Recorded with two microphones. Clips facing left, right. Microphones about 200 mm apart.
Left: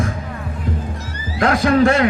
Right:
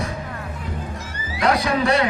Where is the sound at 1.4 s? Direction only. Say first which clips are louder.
Left 6 dB; 50° left (ahead or behind).